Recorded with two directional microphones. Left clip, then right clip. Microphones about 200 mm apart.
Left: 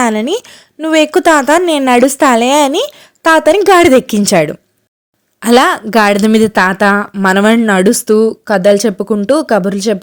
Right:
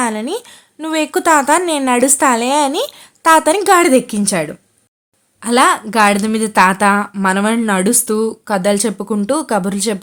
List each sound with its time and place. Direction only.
0.0 s a woman's voice: 35° left (ahead or behind)